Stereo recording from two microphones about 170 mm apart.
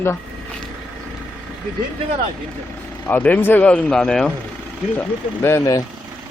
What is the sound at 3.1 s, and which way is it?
Speech, 10° left (ahead or behind).